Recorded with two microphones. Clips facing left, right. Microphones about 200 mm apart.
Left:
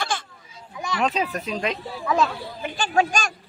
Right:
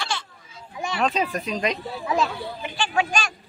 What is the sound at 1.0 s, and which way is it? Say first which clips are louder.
Speech: even; 5° left (ahead or behind).